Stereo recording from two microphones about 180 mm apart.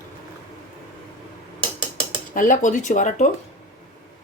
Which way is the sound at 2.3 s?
45° left (ahead or behind).